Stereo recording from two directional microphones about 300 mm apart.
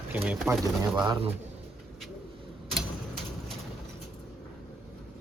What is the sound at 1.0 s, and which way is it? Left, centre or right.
Speech, centre.